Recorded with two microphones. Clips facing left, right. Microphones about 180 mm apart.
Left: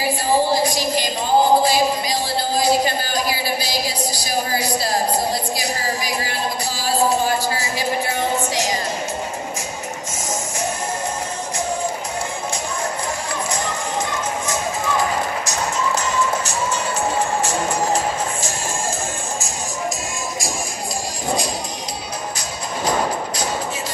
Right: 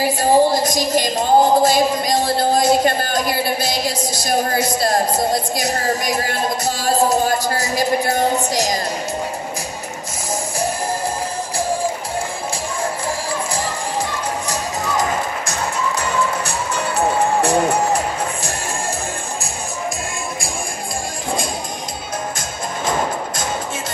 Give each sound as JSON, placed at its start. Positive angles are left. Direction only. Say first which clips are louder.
{"t": 0.2, "sound": "a woman's voice", "louder": "right 4 dB", "side_deg": -45}
{"t": 6.2, "sound": "music", "louder": "right 4 dB", "side_deg": -45}
{"t": 15.4, "sound": "music", "louder": "even", "side_deg": -55}